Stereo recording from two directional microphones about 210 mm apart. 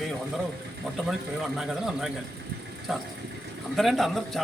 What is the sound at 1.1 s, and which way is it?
A man's voice, centre (ahead or behind).